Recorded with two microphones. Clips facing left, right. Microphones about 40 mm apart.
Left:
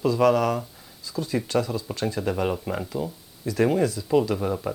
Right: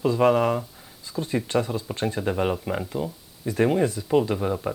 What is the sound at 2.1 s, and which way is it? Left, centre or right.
Speech, right.